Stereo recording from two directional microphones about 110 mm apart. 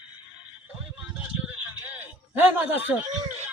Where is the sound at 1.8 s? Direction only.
15° right (ahead or behind).